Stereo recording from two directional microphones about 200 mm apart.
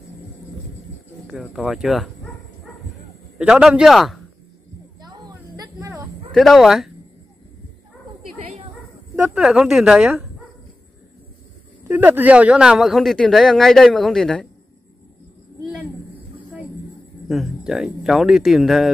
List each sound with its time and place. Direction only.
1.2 s speech: centre (ahead or behind)
3.3 s speech: 5° right (ahead or behind)
5.0 s music: 20° right (ahead or behind)
6.3 s speech: centre (ahead or behind)
9.1 s speech: 5° right (ahead or behind)
11.9 s speech: 10° right (ahead or behind)
17.3 s speech: centre (ahead or behind)